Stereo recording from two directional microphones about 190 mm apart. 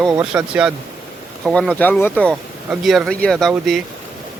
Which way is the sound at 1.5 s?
5° left (ahead or behind).